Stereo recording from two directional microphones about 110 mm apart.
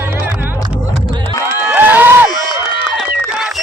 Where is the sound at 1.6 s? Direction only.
15° right (ahead or behind).